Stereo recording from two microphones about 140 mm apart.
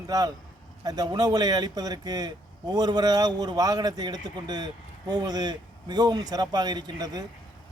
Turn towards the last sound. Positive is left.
turn(degrees=-30)  # may be behind; listen again after turning